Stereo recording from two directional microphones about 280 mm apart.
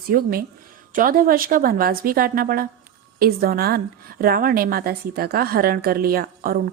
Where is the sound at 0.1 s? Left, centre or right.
Right.